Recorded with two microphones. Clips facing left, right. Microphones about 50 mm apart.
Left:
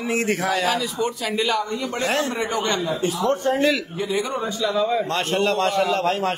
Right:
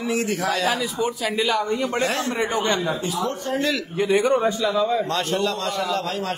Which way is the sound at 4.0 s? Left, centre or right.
Right.